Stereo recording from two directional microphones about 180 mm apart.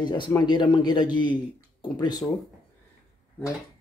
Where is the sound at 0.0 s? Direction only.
25° left (ahead or behind).